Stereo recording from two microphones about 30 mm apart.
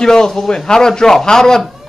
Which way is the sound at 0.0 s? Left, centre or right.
Centre.